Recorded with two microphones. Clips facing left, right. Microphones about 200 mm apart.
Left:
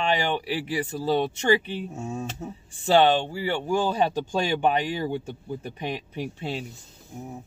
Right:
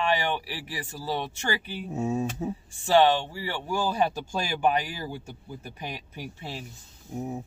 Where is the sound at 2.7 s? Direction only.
25° left (ahead or behind).